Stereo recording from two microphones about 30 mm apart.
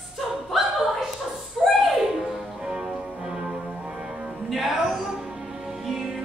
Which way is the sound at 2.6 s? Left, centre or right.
Centre.